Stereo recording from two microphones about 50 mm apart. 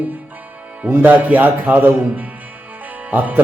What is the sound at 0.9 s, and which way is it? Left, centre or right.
Speech, right.